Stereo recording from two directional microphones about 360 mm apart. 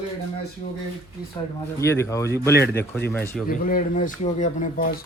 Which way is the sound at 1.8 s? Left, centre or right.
Centre.